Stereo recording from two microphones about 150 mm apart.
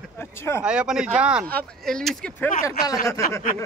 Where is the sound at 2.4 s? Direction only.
20° left (ahead or behind).